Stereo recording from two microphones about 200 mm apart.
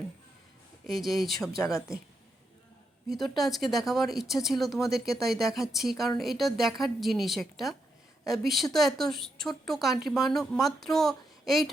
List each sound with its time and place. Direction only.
0.9 s a woman's voice: centre (ahead or behind)
3.2 s a woman's voice: centre (ahead or behind)